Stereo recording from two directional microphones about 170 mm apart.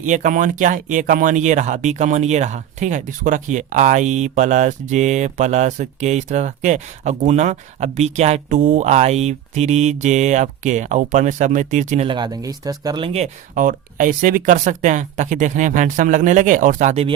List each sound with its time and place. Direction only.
0.0 s speech: 50° right (ahead or behind)
12.0 s speech: 25° right (ahead or behind)
13.1 s speech: 45° right (ahead or behind)